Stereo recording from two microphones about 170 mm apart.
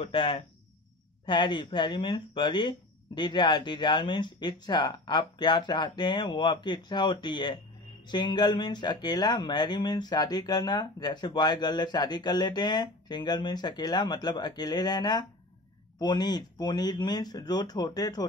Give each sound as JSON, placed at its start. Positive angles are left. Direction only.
{"t": 0.0, "sound": "speech", "side_deg": 30}